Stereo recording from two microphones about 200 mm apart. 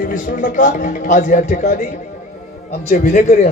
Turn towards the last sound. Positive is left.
turn(degrees=45)  # may be behind; listen again after turning